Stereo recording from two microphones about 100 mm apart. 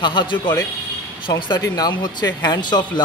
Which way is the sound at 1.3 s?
35° left (ahead or behind).